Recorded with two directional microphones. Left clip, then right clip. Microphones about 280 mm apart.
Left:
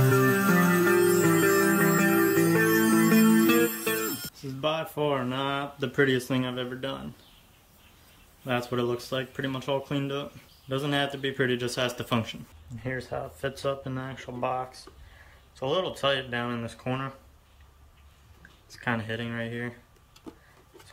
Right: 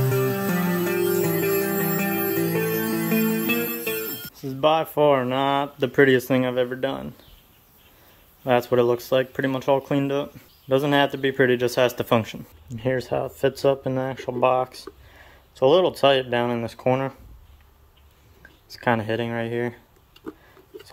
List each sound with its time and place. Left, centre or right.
0.0 s music: centre
4.4 s speech: centre
8.5 s speech: centre
12.8 s speech: right
18.7 s speech: centre